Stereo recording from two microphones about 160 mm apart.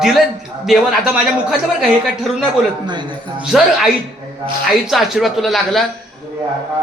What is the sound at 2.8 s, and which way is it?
Speech, 30° right (ahead or behind).